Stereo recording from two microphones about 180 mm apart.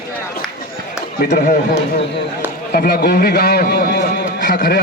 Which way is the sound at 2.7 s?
60° left (ahead or behind).